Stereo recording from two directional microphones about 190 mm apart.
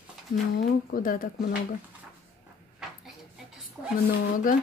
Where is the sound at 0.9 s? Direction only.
45° left (ahead or behind).